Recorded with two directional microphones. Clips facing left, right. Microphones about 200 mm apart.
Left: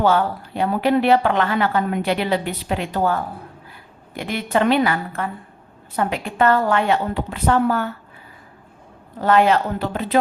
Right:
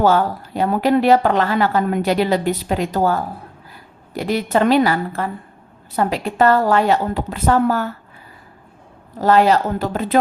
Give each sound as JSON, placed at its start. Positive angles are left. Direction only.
{"t": 0.0, "sound": "speech", "side_deg": -40}
{"t": 9.2, "sound": "speech", "side_deg": -35}